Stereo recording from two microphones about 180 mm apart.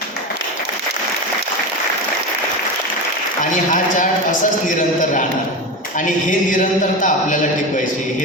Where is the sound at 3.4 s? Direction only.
45° left (ahead or behind).